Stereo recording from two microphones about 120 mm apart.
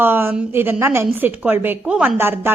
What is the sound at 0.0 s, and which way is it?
A woman's voice, 15° right (ahead or behind).